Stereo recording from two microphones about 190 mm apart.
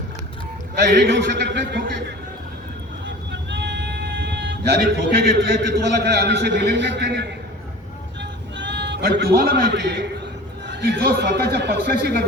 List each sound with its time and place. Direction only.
0.9 s a man's voice: 60° right (ahead or behind)
3.5 s a man's voice: 65° right (ahead or behind)
8.2 s music: 70° right (ahead or behind)
10.7 s a man's voice: 60° right (ahead or behind)